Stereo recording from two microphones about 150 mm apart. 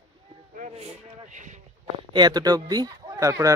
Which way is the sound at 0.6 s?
50° right (ahead or behind).